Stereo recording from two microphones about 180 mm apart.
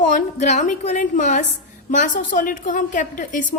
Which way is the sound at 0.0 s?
45° left (ahead or behind).